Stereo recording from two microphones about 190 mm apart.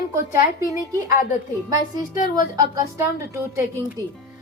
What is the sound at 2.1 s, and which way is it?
Speech, 45° left (ahead or behind).